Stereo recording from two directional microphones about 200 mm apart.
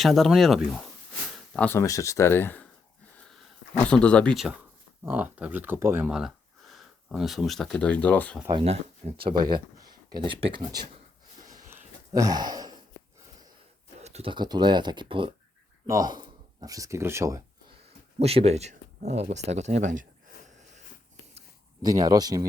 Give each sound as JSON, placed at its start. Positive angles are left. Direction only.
{"t": 0.0, "sound": "speech", "side_deg": 0}
{"t": 1.5, "sound": "speech", "side_deg": 10}
{"t": 3.8, "sound": "speech", "side_deg": 5}
{"t": 8.4, "sound": "speech", "side_deg": -25}
{"t": 11.3, "sound": "a sound", "side_deg": -20}
{"t": 14.0, "sound": "speech", "side_deg": -30}
{"t": 18.2, "sound": "speech", "side_deg": -30}
{"t": 20.5, "sound": "a sound", "side_deg": -35}
{"t": 21.8, "sound": "speech", "side_deg": -20}